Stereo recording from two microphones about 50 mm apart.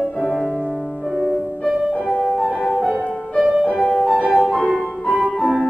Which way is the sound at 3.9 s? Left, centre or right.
Centre.